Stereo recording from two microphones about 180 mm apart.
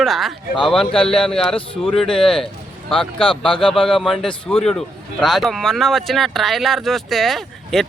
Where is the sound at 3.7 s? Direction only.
Centre (ahead or behind).